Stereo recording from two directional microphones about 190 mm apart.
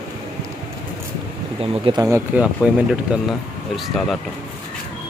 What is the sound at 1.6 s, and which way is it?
Speech, 30° right (ahead or behind).